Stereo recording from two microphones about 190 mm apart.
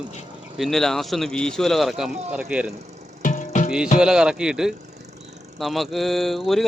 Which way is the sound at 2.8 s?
35° right (ahead or behind).